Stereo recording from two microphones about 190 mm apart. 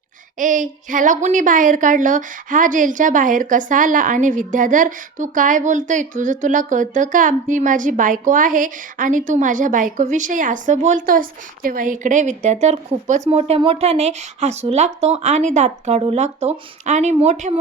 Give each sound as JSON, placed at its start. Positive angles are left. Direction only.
{"t": 0.3, "sound": "a woman's voice", "side_deg": -45}